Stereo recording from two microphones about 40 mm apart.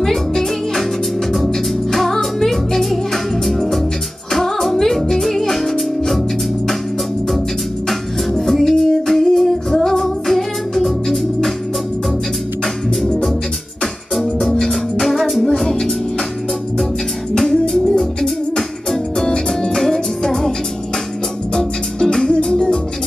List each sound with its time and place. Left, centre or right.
0.0 s music: centre
8.4 s music: centre
14.1 s music: centre
15.6 s music: centre
17.3 s music: centre
21.5 s music: centre